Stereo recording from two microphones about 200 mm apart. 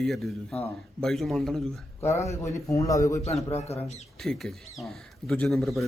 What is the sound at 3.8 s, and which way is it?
Speech, 35° left (ahead or behind).